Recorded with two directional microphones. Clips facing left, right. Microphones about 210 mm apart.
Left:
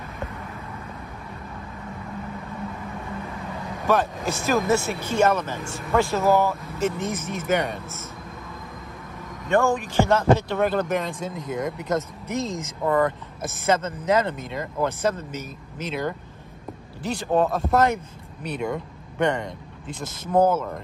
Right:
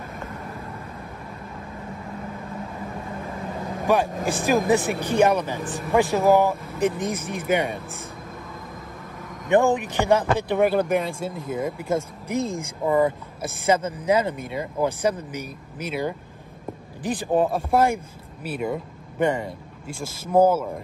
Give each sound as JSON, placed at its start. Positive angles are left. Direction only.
{"t": 3.8, "sound": "speech", "side_deg": -15}
{"t": 9.5, "sound": "speech", "side_deg": -20}